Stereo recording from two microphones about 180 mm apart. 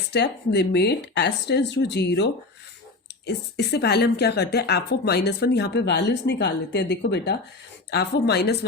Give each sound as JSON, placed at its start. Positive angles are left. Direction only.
{"t": 0.1, "sound": "a woman's voice", "side_deg": 70}